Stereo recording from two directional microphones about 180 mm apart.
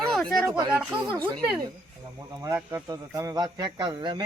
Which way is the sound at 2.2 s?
20° right (ahead or behind).